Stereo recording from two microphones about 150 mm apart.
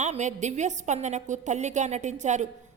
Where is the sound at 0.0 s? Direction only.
50° right (ahead or behind).